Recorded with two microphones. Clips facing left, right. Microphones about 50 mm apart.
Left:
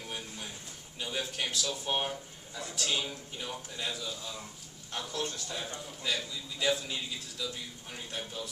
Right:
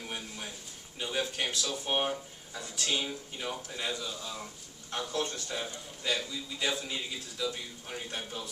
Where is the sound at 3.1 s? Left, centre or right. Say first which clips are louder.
Right 3 dB; centre.